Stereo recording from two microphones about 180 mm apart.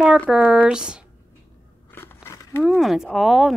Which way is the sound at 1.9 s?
10° left (ahead or behind).